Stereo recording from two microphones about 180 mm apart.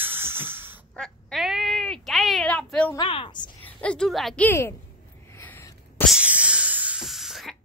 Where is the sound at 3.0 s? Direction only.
25° left (ahead or behind).